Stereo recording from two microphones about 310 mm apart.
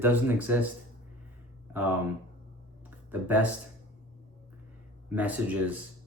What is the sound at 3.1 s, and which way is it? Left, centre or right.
Speech, centre.